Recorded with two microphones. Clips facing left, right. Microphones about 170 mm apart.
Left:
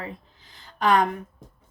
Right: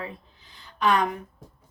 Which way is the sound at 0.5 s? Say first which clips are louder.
Left 2 dB; 45° left (ahead or behind).